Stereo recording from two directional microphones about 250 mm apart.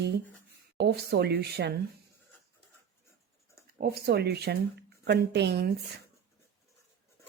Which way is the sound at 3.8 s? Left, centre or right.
Right.